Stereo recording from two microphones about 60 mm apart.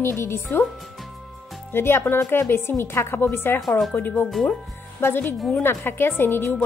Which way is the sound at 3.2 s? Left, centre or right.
Left.